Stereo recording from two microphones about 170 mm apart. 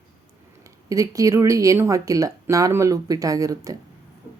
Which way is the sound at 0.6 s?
20° right (ahead or behind).